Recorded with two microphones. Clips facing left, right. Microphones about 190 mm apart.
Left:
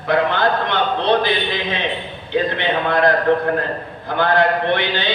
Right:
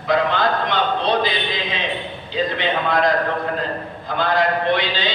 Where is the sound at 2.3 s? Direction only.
60° left (ahead or behind).